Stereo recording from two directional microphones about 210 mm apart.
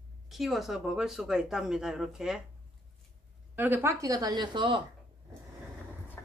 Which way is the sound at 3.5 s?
10° right (ahead or behind).